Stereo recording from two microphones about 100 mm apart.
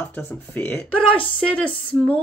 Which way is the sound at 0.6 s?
15° left (ahead or behind).